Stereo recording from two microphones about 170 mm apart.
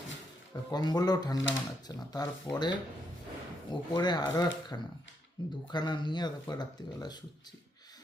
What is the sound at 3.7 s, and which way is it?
Speech, 25° left (ahead or behind).